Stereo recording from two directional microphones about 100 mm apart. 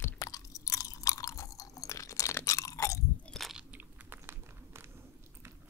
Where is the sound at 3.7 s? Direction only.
20° right (ahead or behind).